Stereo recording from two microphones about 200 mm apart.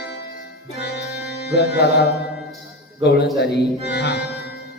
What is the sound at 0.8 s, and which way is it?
Music, 55° left (ahead or behind).